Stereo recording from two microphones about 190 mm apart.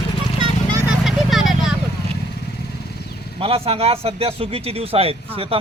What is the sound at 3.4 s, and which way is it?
Speech, 30° right (ahead or behind).